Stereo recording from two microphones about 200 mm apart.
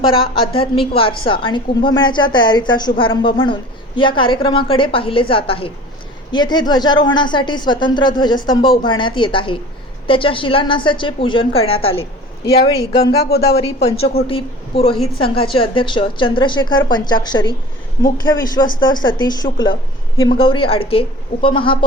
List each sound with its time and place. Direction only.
0.5 s a woman's voice: 30° left (ahead or behind)
13.0 s speech: 50° left (ahead or behind)
13.6 s a woman's voice: 30° left (ahead or behind)